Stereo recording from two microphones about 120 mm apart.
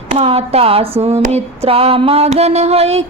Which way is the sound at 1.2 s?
60° right (ahead or behind).